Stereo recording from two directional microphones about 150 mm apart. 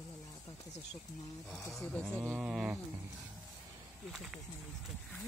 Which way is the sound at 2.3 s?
5° right (ahead or behind).